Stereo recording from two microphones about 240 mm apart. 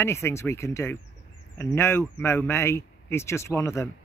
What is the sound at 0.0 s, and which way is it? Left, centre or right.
Speech, centre.